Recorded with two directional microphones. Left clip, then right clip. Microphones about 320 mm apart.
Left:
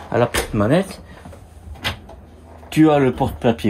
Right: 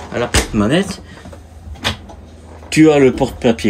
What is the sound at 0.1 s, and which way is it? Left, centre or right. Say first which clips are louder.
Speech: right 1 dB; centre.